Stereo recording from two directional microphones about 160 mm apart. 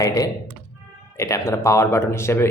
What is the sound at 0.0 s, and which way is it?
Speech, 20° left (ahead or behind).